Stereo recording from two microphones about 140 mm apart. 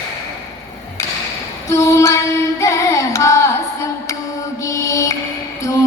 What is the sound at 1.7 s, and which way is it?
Carnatic music, 20° left (ahead or behind).